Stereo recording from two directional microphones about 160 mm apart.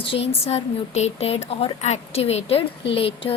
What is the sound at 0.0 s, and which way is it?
A woman's voice, 35° left (ahead or behind).